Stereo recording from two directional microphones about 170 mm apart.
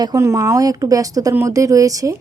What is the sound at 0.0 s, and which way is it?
Speech, 20° right (ahead or behind).